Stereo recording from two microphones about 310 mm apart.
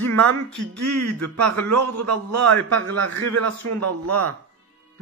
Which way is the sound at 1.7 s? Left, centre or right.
Right.